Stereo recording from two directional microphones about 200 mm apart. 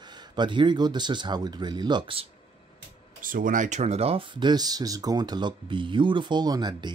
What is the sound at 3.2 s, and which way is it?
Speech, 45° right (ahead or behind).